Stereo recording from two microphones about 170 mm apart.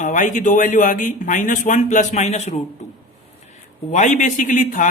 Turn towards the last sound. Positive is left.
turn(degrees=50)  # may be behind; listen again after turning